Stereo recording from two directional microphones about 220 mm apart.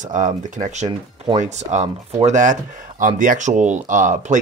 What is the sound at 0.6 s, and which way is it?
Speech, 35° right (ahead or behind).